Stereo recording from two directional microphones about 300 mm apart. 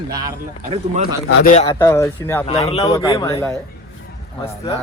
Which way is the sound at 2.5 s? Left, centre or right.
Centre.